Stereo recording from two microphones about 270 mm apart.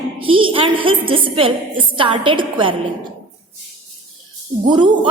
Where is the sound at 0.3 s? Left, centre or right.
Centre.